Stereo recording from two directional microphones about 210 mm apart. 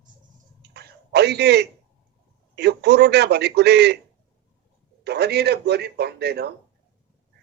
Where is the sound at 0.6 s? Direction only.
50° right (ahead or behind).